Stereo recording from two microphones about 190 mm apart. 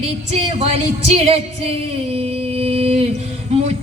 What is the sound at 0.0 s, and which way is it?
Music, 30° right (ahead or behind).